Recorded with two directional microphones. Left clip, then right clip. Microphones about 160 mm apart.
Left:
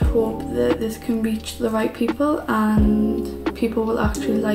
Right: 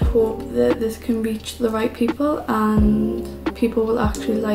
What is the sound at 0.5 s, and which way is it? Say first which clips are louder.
A woman's voice: right 2 dB; centre (ahead or behind).